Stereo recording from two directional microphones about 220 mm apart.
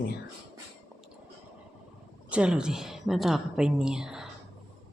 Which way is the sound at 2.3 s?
5° right (ahead or behind).